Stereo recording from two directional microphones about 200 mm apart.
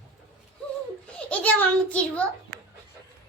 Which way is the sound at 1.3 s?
5° left (ahead or behind).